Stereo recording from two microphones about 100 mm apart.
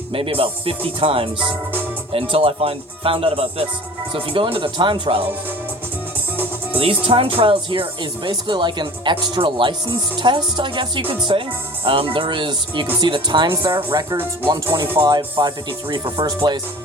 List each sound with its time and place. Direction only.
0.1 s speech: 65° right (ahead or behind)
2.3 s speech: 65° right (ahead or behind)
6.7 s speech: 70° right (ahead or behind); by 14.0 s 50° right (ahead or behind)
14.7 s speech: 40° right (ahead or behind)